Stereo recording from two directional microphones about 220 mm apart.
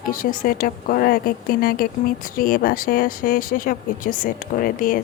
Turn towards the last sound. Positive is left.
turn(degrees=40)  # may be behind; listen again after turning